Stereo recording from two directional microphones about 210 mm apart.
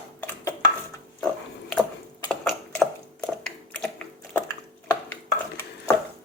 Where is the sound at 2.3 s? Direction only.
5° left (ahead or behind).